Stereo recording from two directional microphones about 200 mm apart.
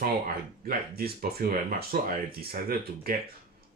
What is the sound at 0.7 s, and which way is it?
Speech, 50° right (ahead or behind).